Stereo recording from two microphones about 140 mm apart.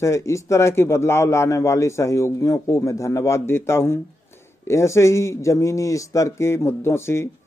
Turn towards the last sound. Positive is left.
turn(degrees=20)  # may be behind; listen again after turning